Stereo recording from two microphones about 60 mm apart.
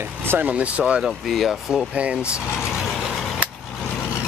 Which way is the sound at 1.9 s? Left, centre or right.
Right.